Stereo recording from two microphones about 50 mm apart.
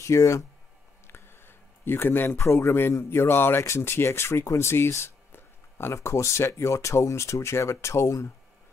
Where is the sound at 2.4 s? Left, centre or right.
Left.